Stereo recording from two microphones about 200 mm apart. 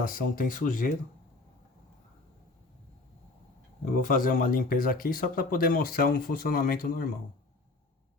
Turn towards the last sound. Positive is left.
turn(degrees=45)  # may be behind; listen again after turning